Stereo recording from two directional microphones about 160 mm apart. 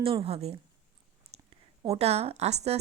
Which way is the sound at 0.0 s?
35° right (ahead or behind).